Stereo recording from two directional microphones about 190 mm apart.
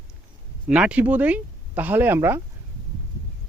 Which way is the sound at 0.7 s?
5° right (ahead or behind).